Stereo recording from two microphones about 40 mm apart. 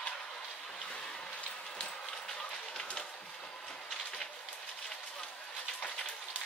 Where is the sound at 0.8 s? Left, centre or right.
Left.